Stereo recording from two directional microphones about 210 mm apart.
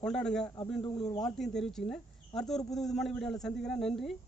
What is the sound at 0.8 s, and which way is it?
Speech, 20° left (ahead or behind).